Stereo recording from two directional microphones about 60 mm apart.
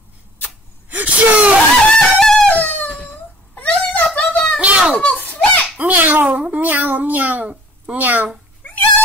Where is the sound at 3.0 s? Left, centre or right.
Left.